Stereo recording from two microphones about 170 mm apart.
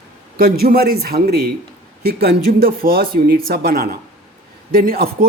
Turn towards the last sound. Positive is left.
turn(degrees=-60)  # may be behind; listen again after turning